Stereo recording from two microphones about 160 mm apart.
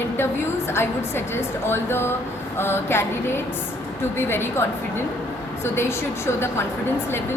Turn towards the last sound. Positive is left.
turn(degrees=15)  # may be behind; listen again after turning